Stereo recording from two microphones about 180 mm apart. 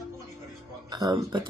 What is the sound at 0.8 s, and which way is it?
Speech, 20° right (ahead or behind).